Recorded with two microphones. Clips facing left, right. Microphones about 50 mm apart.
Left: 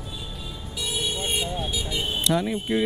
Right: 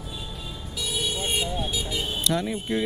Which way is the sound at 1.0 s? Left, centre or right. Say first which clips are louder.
Even; centre.